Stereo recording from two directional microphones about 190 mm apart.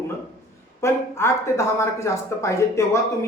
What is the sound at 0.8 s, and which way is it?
Speech, 15° left (ahead or behind).